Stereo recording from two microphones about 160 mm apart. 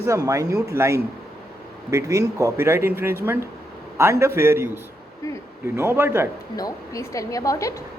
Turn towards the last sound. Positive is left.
turn(degrees=20)  # may be behind; listen again after turning